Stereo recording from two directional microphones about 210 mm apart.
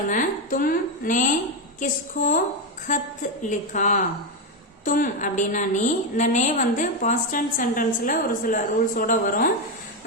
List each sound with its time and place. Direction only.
0.1 s a woman's voice: 40° left (ahead or behind)